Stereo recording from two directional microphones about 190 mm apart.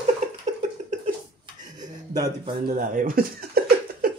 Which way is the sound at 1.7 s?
20° right (ahead or behind).